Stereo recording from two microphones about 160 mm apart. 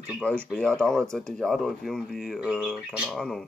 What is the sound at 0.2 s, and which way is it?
Speech, 5° left (ahead or behind).